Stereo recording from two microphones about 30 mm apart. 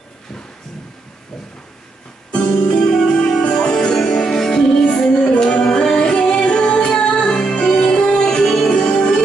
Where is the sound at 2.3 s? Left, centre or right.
Left.